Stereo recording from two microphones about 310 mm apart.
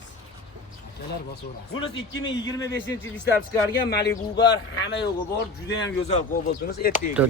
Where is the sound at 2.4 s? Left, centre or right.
Centre.